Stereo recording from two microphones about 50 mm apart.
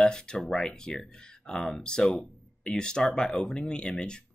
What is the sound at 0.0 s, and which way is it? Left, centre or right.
Speech, centre.